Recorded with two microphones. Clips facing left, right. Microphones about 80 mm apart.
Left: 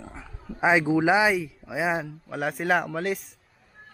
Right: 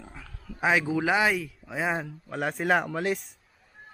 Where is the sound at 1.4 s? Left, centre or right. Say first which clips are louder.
Left 3 dB; centre.